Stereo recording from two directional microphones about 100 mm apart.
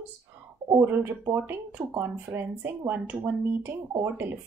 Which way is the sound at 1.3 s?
20° right (ahead or behind).